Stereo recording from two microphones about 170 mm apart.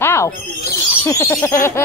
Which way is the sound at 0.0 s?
15° left (ahead or behind).